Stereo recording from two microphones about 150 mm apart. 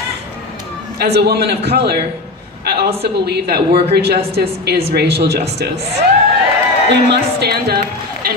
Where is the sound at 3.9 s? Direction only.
90° right.